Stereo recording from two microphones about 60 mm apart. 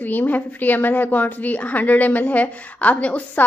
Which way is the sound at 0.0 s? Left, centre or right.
Left.